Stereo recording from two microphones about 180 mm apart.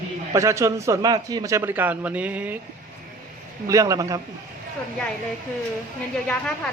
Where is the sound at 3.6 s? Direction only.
20° right (ahead or behind).